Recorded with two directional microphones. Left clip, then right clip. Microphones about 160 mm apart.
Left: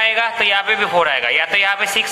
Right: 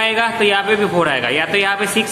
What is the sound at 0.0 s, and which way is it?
A man's voice, 20° left (ahead or behind).